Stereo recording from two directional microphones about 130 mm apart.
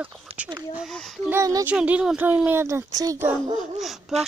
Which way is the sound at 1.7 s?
10° right (ahead or behind).